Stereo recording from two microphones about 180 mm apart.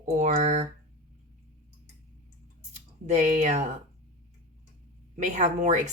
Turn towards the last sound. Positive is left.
turn(degrees=-40)  # may be behind; listen again after turning